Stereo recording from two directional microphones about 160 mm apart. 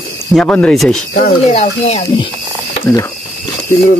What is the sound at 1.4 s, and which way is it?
Speech, 40° left (ahead or behind).